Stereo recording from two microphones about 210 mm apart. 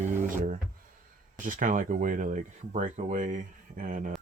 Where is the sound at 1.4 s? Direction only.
40° right (ahead or behind).